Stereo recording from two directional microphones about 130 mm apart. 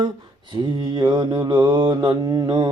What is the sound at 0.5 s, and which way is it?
Mantra, 35° right (ahead or behind).